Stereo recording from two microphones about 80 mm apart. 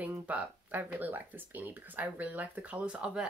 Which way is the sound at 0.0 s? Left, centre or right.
Right.